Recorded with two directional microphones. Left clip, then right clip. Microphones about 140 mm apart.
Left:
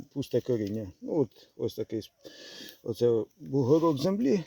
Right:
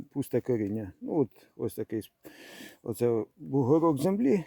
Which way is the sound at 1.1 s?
30° right (ahead or behind).